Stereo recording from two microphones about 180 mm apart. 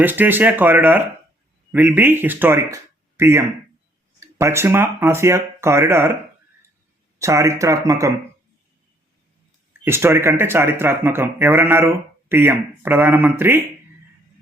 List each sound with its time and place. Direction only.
0.0 s speech: 10° right (ahead or behind)
7.2 s speech: 15° right (ahead or behind)
9.8 s speech: 15° right (ahead or behind)